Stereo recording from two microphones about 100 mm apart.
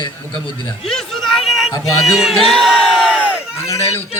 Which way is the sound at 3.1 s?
15° right (ahead or behind).